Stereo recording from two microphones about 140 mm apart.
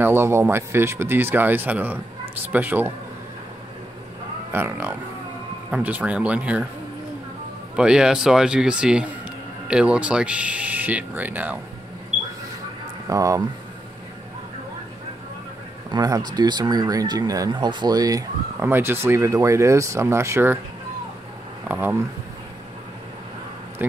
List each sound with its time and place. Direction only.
0.0 s speech: 15° right (ahead or behind)
4.5 s speech: 15° right (ahead or behind)
7.7 s a man's voice: 5° right (ahead or behind)
13.1 s speech: 25° right (ahead or behind)
15.9 s speech: 30° right (ahead or behind)
21.6 s speech: 15° right (ahead or behind)
23.8 s speech: 10° right (ahead or behind)